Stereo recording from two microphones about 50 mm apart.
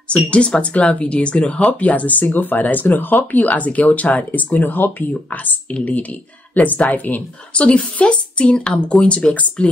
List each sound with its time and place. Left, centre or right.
0.1 s speech: left